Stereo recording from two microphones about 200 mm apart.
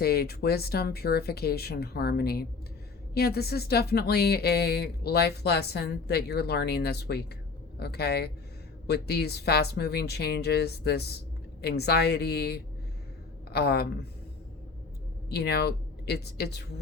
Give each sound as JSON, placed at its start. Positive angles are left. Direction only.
{"t": 0.0, "sound": "speech", "side_deg": 50}
{"t": 15.3, "sound": "speech", "side_deg": 55}